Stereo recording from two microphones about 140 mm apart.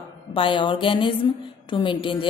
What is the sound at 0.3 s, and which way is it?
A woman's voice, 35° left (ahead or behind).